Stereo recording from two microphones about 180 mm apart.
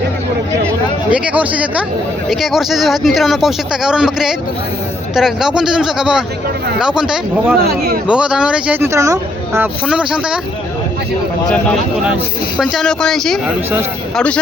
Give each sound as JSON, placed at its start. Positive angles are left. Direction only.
{"t": 1.1, "sound": "speech", "side_deg": -5}
{"t": 9.6, "sound": "speech", "side_deg": -5}
{"t": 12.0, "sound": "speech", "side_deg": -5}